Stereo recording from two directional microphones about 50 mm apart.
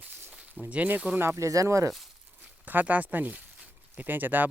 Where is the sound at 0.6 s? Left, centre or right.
Right.